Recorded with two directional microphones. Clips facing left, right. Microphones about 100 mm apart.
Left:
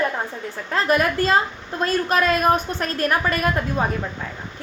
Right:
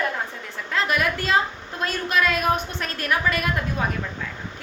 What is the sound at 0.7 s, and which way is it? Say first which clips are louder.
A woman's voice: left 4 dB; 40° left (ahead or behind).